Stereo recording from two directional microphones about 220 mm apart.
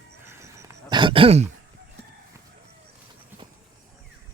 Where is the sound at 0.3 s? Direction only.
15° right (ahead or behind).